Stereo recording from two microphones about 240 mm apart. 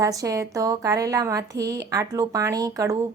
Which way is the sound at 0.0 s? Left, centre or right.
Centre.